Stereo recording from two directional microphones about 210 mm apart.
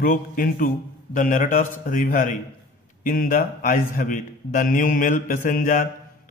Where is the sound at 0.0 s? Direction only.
40° left (ahead or behind).